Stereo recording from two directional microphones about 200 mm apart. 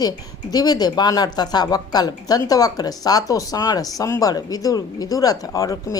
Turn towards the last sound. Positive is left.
turn(degrees=15)  # may be behind; listen again after turning